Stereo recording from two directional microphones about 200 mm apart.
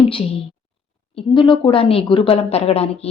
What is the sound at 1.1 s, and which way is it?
Speech, 25° left (ahead or behind).